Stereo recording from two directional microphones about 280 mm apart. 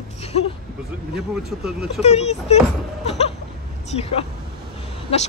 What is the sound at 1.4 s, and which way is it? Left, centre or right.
Speech, centre.